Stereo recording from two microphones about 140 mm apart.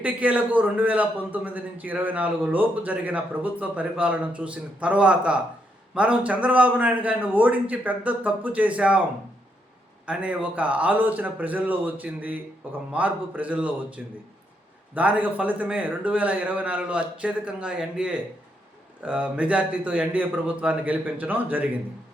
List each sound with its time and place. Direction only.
0.0 s a man's voice: 10° right (ahead or behind)
10.1 s a man's voice: 10° right (ahead or behind)